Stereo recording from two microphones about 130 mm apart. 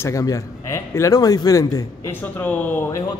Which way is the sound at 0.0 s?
25° left (ahead or behind).